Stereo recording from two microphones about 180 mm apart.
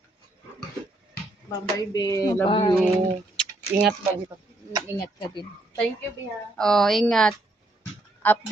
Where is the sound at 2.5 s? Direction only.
30° left (ahead or behind).